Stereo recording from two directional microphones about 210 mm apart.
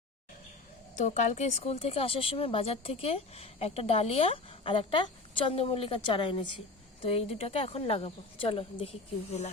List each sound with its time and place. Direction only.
0.9 s speech: 35° left (ahead or behind)